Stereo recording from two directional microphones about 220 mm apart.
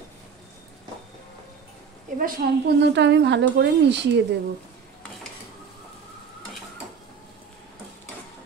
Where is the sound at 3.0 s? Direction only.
55° right (ahead or behind).